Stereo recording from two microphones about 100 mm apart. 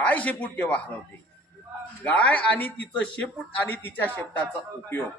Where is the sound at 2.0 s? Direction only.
15° left (ahead or behind).